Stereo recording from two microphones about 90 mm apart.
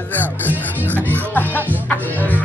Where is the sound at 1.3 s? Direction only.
20° left (ahead or behind).